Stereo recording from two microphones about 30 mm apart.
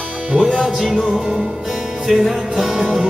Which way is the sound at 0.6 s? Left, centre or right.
Centre.